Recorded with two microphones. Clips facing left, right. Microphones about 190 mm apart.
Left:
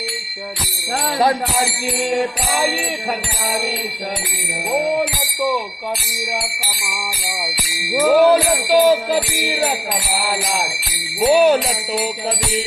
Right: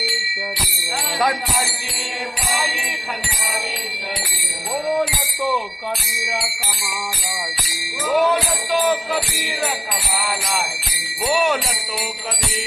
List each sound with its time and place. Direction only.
8.1 s music: 30° left (ahead or behind)
10.2 s music: 35° left (ahead or behind)